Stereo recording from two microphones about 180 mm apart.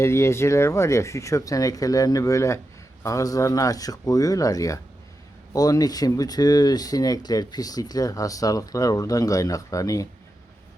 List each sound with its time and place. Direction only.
0.0 s speech: 15° left (ahead or behind)